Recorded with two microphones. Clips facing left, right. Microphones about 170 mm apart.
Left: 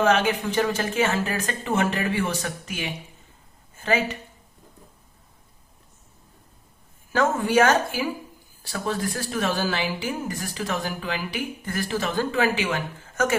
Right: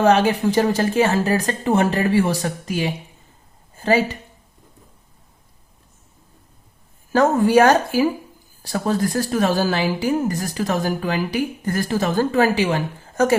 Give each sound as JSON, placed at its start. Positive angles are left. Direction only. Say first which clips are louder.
{"t": 0.0, "sound": "a woman's voice", "louder": "right 5 dB", "side_deg": -35}
{"t": 7.1, "sound": "a woman's voice", "louder": "right 6 dB", "side_deg": -40}